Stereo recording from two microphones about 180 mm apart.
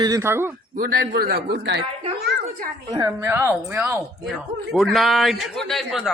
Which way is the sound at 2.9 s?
15° right (ahead or behind).